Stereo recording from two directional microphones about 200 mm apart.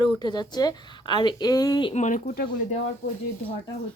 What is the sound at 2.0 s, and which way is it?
Speech, 40° left (ahead or behind).